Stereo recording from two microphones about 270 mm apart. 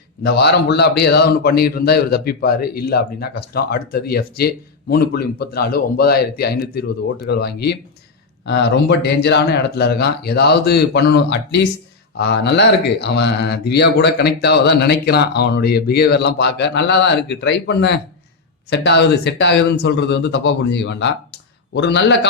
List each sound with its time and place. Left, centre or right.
0.2 s a man's voice: left